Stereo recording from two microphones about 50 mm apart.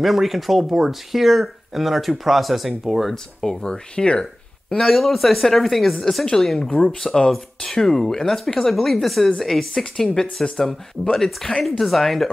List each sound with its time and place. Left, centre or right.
0.0 s speech: centre
3.6 s speech: centre
6.7 s speech: left
7.0 s speech: centre